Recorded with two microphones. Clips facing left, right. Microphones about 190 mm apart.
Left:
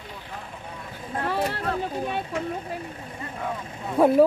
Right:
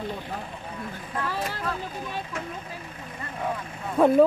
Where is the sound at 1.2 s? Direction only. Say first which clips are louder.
Left 5 dB; 60° left (ahead or behind).